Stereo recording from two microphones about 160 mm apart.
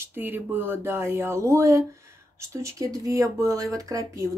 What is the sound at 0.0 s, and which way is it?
Speech, 15° right (ahead or behind).